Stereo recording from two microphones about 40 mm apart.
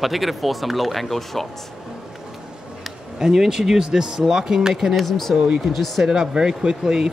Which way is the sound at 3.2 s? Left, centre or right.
Centre.